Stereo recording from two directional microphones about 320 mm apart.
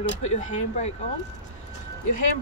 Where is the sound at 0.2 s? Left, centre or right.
Left.